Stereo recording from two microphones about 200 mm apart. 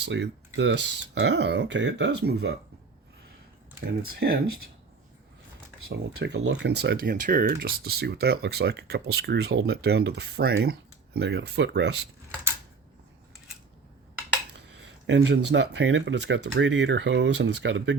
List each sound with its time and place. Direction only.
0.0 s speech: 60° right (ahead or behind)
3.8 s speech: 50° right (ahead or behind)
5.9 s speech: 60° right (ahead or behind)
15.0 s speech: 65° right (ahead or behind)